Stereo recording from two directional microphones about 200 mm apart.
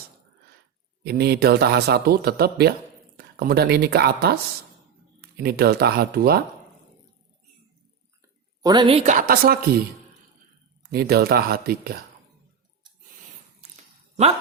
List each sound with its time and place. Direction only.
1.0 s a man's voice: 50° right (ahead or behind)
8.6 s speech: 20° right (ahead or behind); by 9.6 s 45° right (ahead or behind)
10.8 s a man's voice: 50° right (ahead or behind)